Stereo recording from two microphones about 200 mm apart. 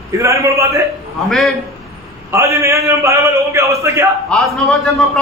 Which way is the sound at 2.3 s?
15° right (ahead or behind).